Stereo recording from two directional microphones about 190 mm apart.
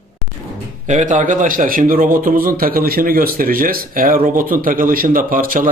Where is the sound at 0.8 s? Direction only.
40° right (ahead or behind).